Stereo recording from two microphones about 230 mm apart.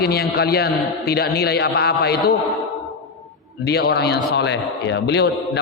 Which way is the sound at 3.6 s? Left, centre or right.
Left.